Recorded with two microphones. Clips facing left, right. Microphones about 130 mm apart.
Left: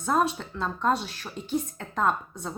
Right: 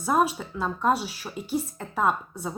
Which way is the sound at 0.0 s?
10° right (ahead or behind).